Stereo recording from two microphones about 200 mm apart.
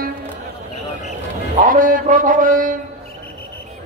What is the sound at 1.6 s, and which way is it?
Mantra, 45° right (ahead or behind).